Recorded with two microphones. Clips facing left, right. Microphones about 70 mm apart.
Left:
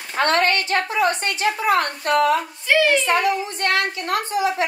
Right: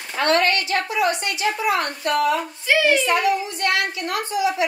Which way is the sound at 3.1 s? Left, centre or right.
Left.